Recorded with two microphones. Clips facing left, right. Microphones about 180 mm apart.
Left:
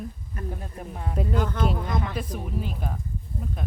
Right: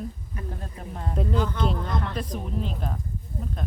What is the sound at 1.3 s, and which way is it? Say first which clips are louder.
Speech: even; 50° left (ahead or behind).